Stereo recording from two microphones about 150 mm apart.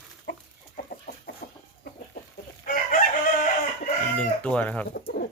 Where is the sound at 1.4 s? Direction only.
70° left (ahead or behind).